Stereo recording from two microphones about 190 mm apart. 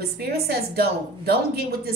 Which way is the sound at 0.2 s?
55° right (ahead or behind).